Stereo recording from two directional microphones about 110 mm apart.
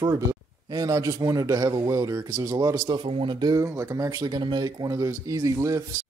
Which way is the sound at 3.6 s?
30° right (ahead or behind).